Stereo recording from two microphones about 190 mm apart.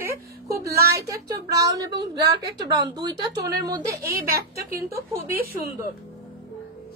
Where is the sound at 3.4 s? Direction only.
60° right (ahead or behind).